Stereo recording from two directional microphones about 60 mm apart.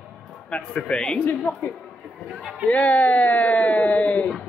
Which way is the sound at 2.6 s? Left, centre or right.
Left.